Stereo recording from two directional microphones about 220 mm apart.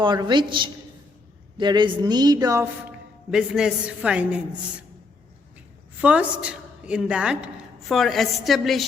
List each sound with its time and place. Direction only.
0.0 s a woman's voice: 20° right (ahead or behind)
3.3 s a woman's voice: 5° right (ahead or behind)
6.0 s a woman's voice: 5° right (ahead or behind)